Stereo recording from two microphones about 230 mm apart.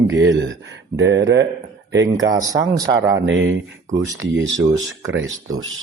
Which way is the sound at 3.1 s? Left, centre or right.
Right.